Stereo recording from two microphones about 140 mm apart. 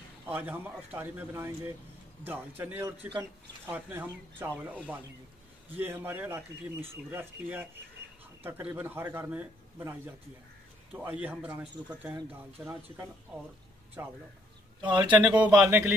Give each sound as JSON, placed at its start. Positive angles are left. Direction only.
{"t": 0.3, "sound": "speech", "side_deg": -10}
{"t": 5.8, "sound": "speech", "side_deg": -15}
{"t": 15.1, "sound": "speech", "side_deg": -10}